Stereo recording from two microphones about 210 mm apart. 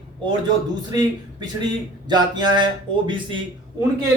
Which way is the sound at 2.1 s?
20° right (ahead or behind).